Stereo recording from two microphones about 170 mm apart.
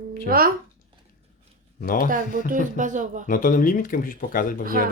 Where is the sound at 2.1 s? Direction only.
50° right (ahead or behind).